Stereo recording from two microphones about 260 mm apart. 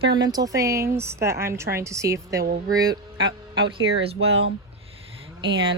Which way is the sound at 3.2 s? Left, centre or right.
Right.